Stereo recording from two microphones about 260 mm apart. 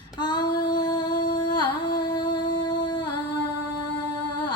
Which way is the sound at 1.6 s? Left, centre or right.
Left.